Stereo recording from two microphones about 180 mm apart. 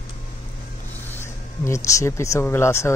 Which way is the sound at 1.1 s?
15° left (ahead or behind).